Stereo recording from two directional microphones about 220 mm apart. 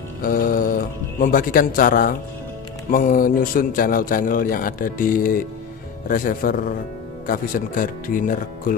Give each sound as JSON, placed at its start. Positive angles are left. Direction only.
{"t": 0.2, "sound": "a man's voice", "side_deg": 40}